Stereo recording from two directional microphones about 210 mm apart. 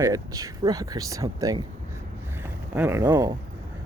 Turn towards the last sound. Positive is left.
turn(degrees=-15)  # may be behind; listen again after turning